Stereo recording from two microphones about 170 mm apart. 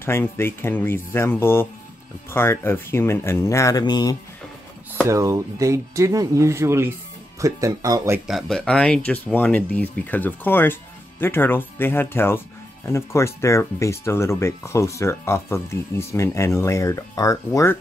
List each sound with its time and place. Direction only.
0.0 s speech: 15° left (ahead or behind)
5.0 s speech: 20° right (ahead or behind)
8.3 s speech: centre (ahead or behind); by 17.7 s 20° left (ahead or behind)